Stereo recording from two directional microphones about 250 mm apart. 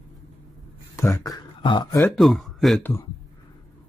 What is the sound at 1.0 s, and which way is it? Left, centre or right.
Speech, centre.